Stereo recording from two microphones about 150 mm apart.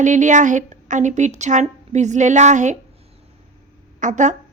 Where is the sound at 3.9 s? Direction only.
55° right (ahead or behind).